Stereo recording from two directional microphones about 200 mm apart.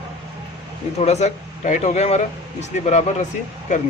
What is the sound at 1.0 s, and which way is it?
Speech, 35° left (ahead or behind).